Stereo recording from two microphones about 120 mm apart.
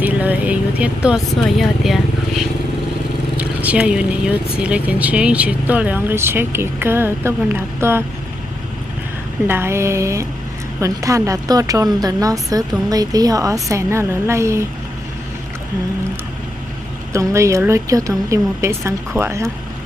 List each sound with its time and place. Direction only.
0.0 s speech: 15° right (ahead or behind)
3.3 s speech: 10° right (ahead or behind)
9.5 s a woman's voice: 20° right (ahead or behind)
17.1 s a woman's voice: 25° right (ahead or behind)